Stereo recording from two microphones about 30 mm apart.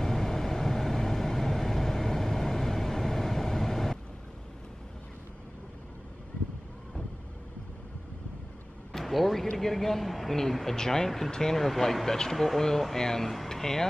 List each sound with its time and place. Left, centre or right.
0.0 s vehicle: centre
8.9 s a sound: centre
9.6 s a man's voice: centre